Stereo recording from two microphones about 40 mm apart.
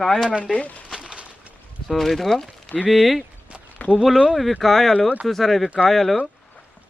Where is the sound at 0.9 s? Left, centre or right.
Right.